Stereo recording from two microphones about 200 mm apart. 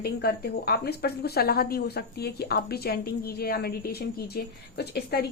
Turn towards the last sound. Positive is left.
turn(degrees=55)  # may be behind; listen again after turning